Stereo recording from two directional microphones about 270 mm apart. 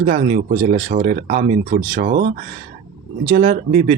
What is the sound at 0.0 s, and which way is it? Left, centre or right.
Speech, right.